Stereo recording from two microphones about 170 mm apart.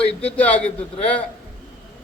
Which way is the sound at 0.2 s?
10° left (ahead or behind).